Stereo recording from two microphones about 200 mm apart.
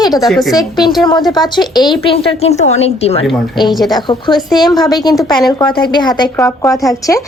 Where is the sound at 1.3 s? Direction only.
20° left (ahead or behind).